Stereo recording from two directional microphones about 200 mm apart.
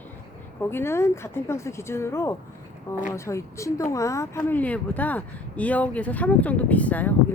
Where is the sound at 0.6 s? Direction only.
10° left (ahead or behind).